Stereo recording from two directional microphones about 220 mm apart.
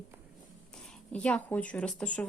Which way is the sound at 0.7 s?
5° left (ahead or behind).